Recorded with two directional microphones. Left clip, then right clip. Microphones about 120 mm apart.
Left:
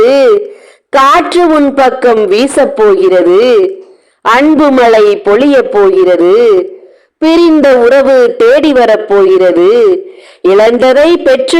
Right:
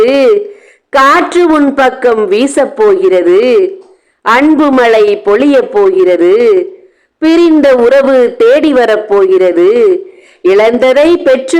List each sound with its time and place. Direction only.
0.0 s a man's voice: 20° left (ahead or behind)
3.0 s a man's voice: 25° left (ahead or behind)
4.5 s a man's voice: 10° left (ahead or behind)
8.1 s a man's voice: 25° left (ahead or behind)
8.7 s speech: 10° left (ahead or behind)
9.3 s a man's voice: 30° left (ahead or behind)